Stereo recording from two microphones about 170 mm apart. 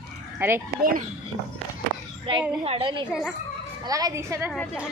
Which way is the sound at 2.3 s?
30° right (ahead or behind).